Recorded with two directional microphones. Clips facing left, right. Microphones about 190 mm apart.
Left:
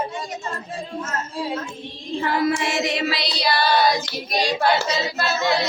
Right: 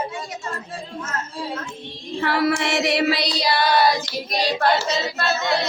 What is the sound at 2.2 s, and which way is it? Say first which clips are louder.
Music: right 1 dB; 70° right (ahead or behind).